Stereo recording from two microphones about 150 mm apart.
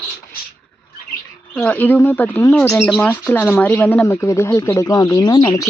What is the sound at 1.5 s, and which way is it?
Speech, 10° left (ahead or behind).